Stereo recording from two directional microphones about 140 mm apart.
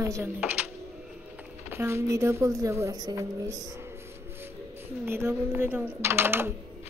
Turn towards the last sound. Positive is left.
turn(degrees=-15)  # may be behind; listen again after turning